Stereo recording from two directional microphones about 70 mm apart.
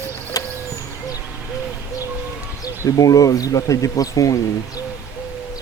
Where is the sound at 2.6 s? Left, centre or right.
Left.